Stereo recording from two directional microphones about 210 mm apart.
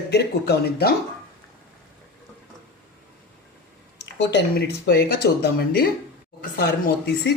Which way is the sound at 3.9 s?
50° left (ahead or behind).